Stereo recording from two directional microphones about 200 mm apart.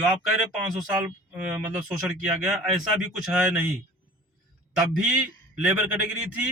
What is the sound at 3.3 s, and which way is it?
Speech, 10° right (ahead or behind).